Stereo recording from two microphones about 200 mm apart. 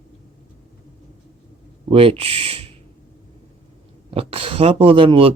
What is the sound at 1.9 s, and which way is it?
Speech, 30° right (ahead or behind).